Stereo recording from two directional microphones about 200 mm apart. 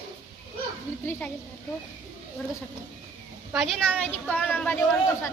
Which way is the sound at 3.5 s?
Centre (ahead or behind).